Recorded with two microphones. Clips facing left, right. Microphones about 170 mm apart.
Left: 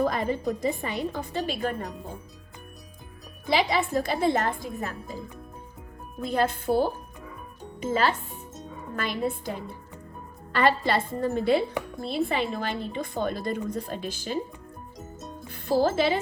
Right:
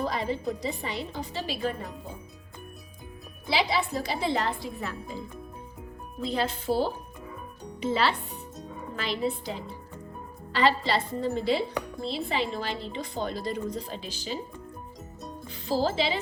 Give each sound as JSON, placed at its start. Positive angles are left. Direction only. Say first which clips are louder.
{"t": 0.0, "sound": "speech", "louder": "left 4 dB", "side_deg": 50}
{"t": 3.5, "sound": "speech", "louder": "left 3 dB", "side_deg": 50}
{"t": 6.2, "sound": "a child's voice", "louder": "left 3 dB", "side_deg": 55}
{"t": 15.4, "sound": "speech", "louder": "left 4 dB", "side_deg": 55}